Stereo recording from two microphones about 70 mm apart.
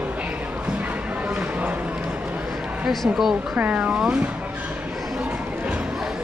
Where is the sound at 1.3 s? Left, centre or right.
Centre.